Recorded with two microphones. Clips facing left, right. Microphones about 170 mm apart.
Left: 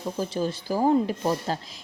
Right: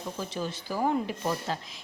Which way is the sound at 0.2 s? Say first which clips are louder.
Left 8 dB; 35° left (ahead or behind).